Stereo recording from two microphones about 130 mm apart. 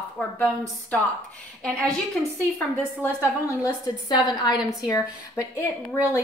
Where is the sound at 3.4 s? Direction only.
25° left (ahead or behind).